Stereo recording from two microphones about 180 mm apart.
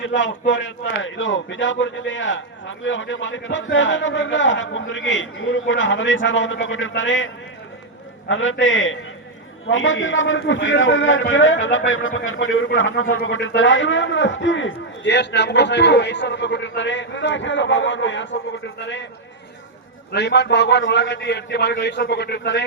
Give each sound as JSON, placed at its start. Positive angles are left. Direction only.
{"t": 0.0, "sound": "speech", "side_deg": 90}
{"t": 8.3, "sound": "speech", "side_deg": 90}
{"t": 18.8, "sound": "a man's voice", "side_deg": 80}
{"t": 20.1, "sound": "a man's voice", "side_deg": 70}